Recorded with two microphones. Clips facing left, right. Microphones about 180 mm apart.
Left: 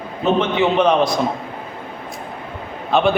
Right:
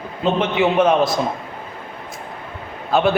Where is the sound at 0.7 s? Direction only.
5° right (ahead or behind).